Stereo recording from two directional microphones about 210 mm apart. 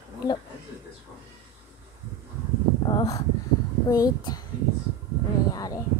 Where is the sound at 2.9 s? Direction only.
15° left (ahead or behind).